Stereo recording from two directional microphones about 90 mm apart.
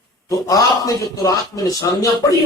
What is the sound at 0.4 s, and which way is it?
A man's voice, 40° left (ahead or behind).